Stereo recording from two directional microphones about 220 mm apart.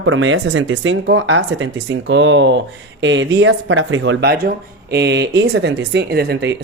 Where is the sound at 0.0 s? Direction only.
60° right (ahead or behind).